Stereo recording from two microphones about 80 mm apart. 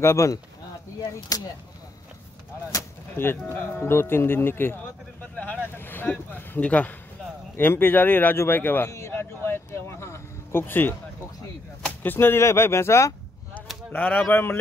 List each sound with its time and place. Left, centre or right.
0.0 s speech: left
3.2 s speech: left
5.3 s vehicle: centre
5.8 s speech: left
8.9 s a sound: left
12.0 s speech: left
13.9 s speech: left